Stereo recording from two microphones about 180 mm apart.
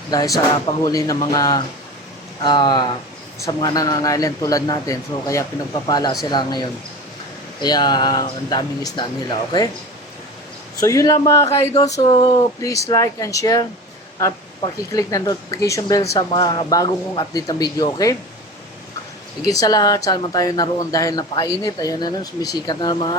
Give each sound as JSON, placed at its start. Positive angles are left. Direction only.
{"t": 0.1, "sound": "speech", "side_deg": 20}
{"t": 10.8, "sound": "speech", "side_deg": 20}
{"t": 19.5, "sound": "speech", "side_deg": 20}